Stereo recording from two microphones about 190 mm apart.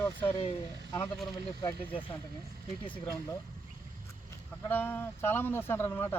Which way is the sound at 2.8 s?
10° left (ahead or behind).